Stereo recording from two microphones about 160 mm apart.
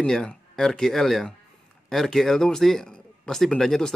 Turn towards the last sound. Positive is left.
turn(degrees=5)  # may be behind; listen again after turning